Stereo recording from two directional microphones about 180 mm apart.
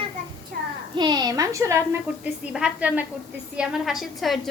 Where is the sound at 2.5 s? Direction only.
5° right (ahead or behind).